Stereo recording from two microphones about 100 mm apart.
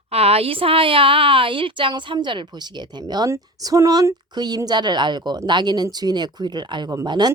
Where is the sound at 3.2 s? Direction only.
35° right (ahead or behind).